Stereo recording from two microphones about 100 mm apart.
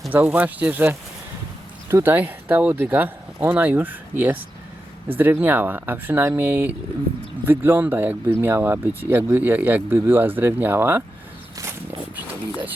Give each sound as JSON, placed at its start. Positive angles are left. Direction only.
{"t": 0.1, "sound": "speech", "side_deg": -15}